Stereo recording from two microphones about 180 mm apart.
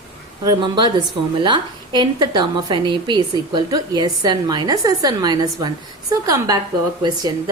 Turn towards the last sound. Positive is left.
turn(degrees=-25)  # may be behind; listen again after turning